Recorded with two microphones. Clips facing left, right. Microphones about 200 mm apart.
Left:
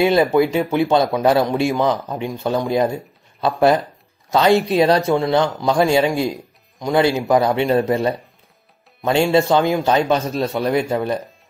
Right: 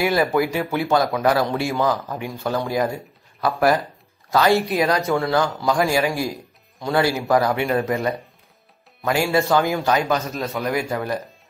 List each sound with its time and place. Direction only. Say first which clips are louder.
0.0 s speech: left 5 dB; 20° left (ahead or behind)